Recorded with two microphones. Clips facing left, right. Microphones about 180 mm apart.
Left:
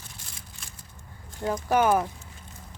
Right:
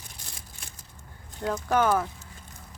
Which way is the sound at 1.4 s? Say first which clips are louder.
Left 1 dB; 10° left (ahead or behind).